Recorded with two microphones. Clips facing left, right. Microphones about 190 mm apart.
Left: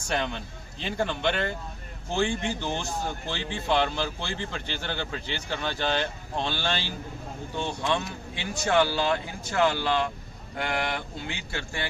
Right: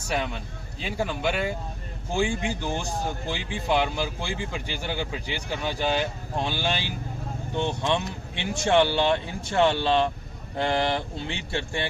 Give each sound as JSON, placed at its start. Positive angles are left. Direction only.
{"t": 0.1, "sound": "a man's voice", "side_deg": -5}